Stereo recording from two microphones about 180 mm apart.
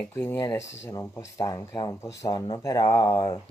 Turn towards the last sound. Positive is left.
turn(degrees=15)  # may be behind; listen again after turning